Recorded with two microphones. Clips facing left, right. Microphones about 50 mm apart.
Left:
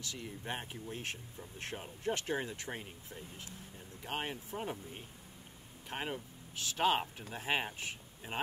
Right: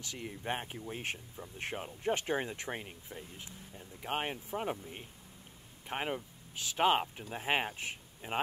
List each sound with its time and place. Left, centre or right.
0.0 s speech: right